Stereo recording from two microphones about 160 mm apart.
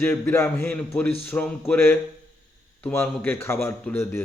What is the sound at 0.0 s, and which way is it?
Speech, 15° left (ahead or behind).